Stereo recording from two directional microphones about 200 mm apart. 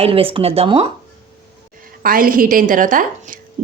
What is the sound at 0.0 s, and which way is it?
Speech, 30° right (ahead or behind).